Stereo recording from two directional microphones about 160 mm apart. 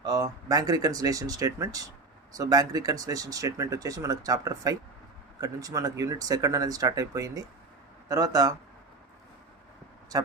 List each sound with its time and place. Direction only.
0.0 s speech: 20° right (ahead or behind)